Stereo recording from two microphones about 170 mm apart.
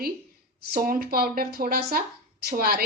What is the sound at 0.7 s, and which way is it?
Speech, 55° right (ahead or behind).